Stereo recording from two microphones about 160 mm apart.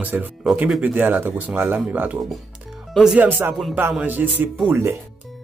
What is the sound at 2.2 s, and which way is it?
Speech, centre (ahead or behind).